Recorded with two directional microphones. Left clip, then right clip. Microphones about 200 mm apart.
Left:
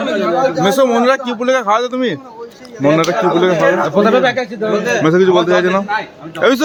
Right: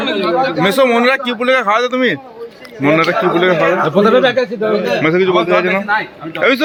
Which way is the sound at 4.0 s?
45° right (ahead or behind).